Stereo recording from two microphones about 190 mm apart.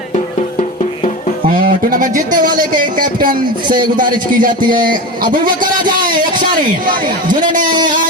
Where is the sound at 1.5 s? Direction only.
45° right (ahead or behind).